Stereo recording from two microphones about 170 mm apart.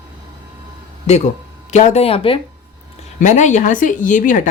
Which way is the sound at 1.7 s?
45° left (ahead or behind).